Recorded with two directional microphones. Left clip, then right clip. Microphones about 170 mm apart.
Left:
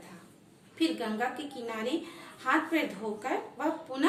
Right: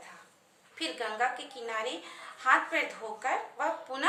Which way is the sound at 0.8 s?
15° right (ahead or behind).